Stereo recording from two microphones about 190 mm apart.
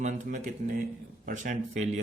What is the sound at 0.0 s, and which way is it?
A man's voice, 40° right (ahead or behind).